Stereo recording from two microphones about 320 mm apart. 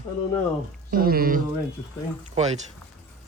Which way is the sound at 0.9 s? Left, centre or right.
Right.